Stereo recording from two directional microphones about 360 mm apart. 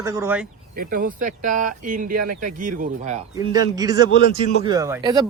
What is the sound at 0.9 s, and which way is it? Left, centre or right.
Speech, right.